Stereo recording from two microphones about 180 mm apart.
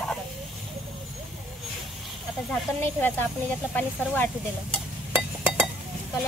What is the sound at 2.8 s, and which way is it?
Speech, 10° left (ahead or behind).